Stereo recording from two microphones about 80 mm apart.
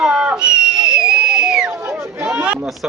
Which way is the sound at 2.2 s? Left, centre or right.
Centre.